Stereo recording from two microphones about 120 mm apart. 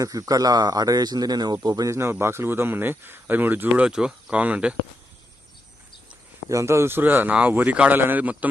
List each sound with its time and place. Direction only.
0.0 s speech: 30° right (ahead or behind); by 4.7 s 10° right (ahead or behind)
6.5 s speech: 25° right (ahead or behind)